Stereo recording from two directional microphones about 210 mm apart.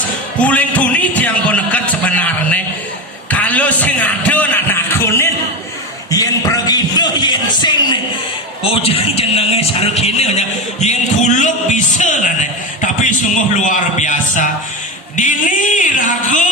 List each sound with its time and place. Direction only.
0.3 s music: 5° left (ahead or behind)
3.2 s a sound: 5° left (ahead or behind)
8.6 s a man's voice: 25° left (ahead or behind)
13.7 s music: 35° left (ahead or behind)